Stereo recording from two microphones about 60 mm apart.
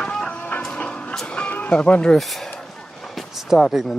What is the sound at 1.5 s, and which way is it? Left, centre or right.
Music, left.